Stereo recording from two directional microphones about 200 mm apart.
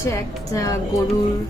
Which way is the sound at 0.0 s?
15° left (ahead or behind).